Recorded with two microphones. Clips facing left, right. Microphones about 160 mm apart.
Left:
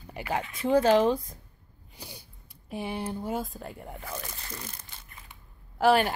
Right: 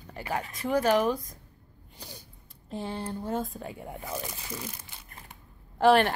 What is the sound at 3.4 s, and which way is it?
Speech, centre (ahead or behind).